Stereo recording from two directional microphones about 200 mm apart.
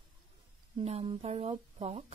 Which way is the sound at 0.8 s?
30° right (ahead or behind).